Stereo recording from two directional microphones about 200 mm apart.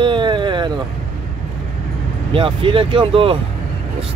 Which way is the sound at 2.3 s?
25° right (ahead or behind).